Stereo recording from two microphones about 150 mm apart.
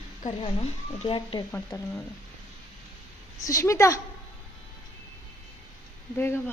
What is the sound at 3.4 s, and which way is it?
Speech, 20° left (ahead or behind).